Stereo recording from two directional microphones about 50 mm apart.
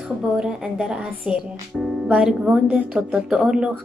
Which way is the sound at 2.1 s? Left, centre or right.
Centre.